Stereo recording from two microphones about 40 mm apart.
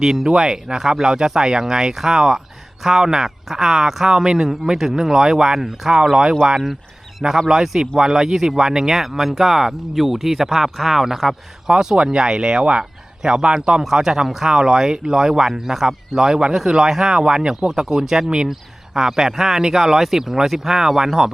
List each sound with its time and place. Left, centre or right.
0.0 s speech: centre
7.2 s speech: centre
11.7 s speech: centre